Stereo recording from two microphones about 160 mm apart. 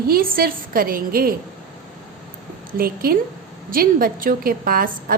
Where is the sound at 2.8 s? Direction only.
70° right (ahead or behind).